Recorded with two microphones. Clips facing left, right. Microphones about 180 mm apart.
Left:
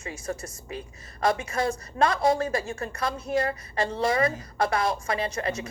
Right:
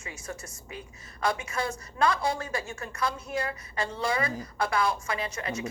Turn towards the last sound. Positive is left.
turn(degrees=35)  # may be behind; listen again after turning